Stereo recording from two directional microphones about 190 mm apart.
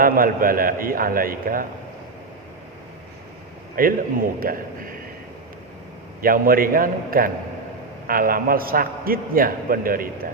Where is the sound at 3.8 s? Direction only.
50° right (ahead or behind).